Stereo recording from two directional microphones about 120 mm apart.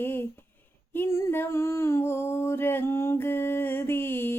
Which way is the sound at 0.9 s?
20° left (ahead or behind).